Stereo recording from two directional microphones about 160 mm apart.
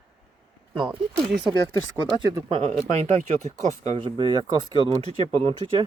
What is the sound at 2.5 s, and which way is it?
Speech, 40° right (ahead or behind).